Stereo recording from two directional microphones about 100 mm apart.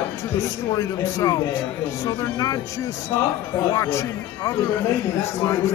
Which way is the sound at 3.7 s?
30° left (ahead or behind).